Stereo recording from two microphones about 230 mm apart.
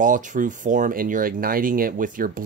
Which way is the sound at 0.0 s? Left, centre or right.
Right.